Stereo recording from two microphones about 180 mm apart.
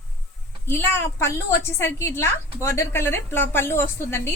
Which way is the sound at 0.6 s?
10° left (ahead or behind).